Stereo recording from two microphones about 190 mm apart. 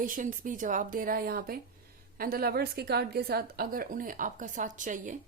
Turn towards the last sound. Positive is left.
turn(degrees=-40)  # may be behind; listen again after turning